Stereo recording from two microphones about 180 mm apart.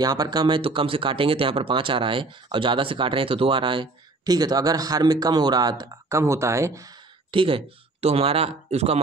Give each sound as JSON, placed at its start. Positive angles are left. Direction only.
{"t": 0.0, "sound": "speech", "side_deg": -20}
{"t": 7.2, "sound": "speech", "side_deg": -30}